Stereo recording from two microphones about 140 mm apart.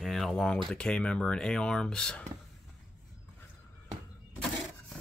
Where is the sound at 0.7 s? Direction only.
5° left (ahead or behind).